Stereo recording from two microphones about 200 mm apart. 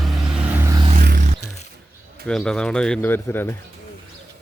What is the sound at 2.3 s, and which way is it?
A man's voice, 5° left (ahead or behind).